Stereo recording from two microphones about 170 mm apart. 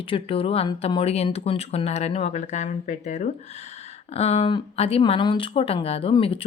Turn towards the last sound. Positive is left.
turn(degrees=35)  # may be behind; listen again after turning